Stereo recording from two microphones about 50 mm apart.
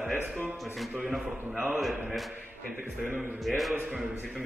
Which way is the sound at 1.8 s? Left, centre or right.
Centre.